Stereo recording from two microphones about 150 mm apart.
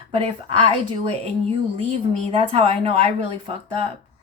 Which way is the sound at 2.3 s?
40° right (ahead or behind).